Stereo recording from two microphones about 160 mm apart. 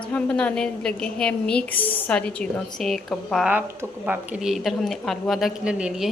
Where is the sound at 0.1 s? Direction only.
10° left (ahead or behind).